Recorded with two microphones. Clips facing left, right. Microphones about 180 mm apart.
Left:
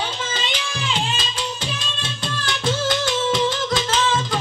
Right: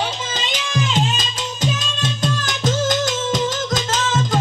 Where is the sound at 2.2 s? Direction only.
45° right (ahead or behind).